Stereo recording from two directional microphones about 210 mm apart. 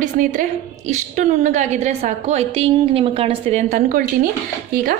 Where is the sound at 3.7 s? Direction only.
40° right (ahead or behind).